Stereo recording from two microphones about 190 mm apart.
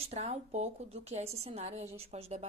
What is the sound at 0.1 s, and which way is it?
Speech, 35° right (ahead or behind).